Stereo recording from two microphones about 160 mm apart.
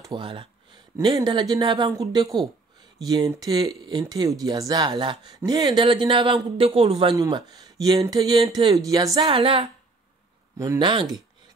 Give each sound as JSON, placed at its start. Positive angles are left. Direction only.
{"t": 0.0, "sound": "speech", "side_deg": -30}
{"t": 7.2, "sound": "speech", "side_deg": -25}
{"t": 10.8, "sound": "speech", "side_deg": -30}